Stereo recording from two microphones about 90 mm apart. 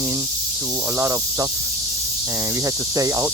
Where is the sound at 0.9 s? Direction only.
35° right (ahead or behind).